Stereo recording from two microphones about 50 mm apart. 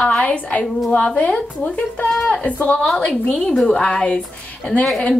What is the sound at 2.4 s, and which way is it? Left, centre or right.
Speech, left.